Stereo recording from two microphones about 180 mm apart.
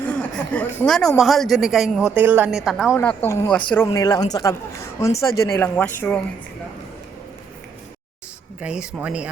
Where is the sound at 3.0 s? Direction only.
10° left (ahead or behind).